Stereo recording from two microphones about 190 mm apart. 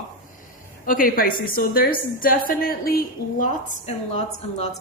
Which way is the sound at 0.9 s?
50° left (ahead or behind).